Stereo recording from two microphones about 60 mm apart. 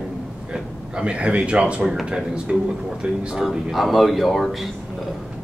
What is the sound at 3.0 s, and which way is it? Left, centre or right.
Speech, centre.